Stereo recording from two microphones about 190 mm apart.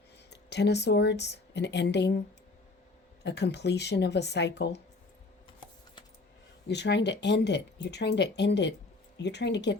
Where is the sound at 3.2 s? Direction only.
60° left (ahead or behind).